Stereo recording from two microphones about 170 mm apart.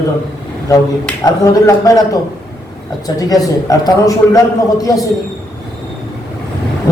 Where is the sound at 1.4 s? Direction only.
20° left (ahead or behind).